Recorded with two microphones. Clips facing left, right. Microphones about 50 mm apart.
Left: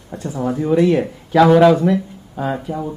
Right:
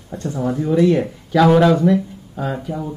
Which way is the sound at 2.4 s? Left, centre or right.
Centre.